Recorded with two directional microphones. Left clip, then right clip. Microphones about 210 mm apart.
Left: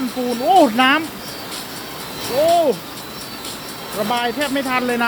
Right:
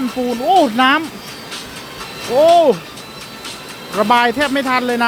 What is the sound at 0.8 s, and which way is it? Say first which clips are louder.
Speech: right 2 dB; 20° right (ahead or behind).